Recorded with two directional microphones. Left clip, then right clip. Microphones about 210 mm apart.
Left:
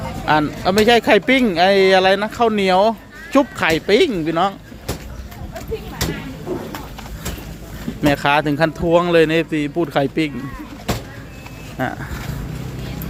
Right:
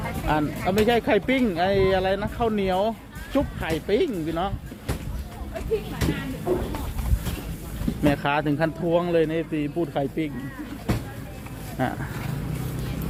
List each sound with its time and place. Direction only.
0.3 s speech: 25° left (ahead or behind)
6.0 s a sound: 50° left (ahead or behind)
8.0 s speech: 15° left (ahead or behind)
11.8 s speech: 5° left (ahead or behind)